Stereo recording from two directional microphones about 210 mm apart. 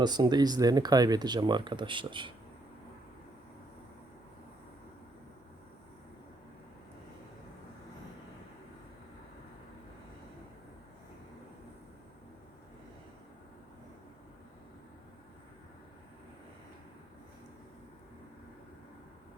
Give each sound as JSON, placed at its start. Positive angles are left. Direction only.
{"t": 0.0, "sound": "speech", "side_deg": -20}